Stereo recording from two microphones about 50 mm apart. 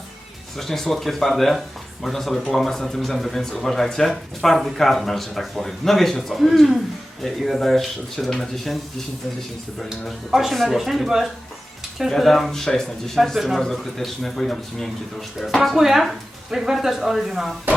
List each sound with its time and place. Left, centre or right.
0.5 s speech: centre
10.3 s speech: centre
15.5 s speech: centre